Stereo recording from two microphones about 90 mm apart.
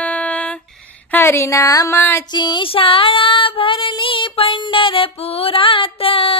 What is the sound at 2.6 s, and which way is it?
Child singing, 90° left.